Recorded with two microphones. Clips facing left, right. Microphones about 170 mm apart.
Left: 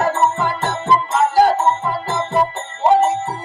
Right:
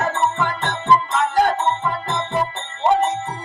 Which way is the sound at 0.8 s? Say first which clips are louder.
Left 1 dB; 5° left (ahead or behind).